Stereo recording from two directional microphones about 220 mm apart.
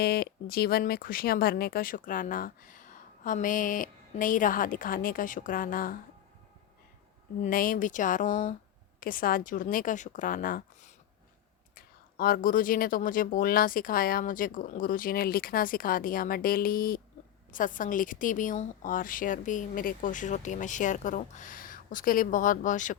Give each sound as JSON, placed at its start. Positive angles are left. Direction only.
{"t": 0.0, "sound": "a woman's voice", "side_deg": 45}
{"t": 7.4, "sound": "a woman's voice", "side_deg": 40}